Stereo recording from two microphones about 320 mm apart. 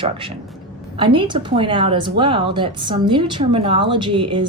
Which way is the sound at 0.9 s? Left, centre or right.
Centre.